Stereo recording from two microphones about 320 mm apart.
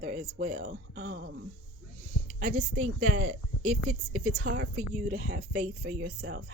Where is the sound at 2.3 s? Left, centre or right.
Right.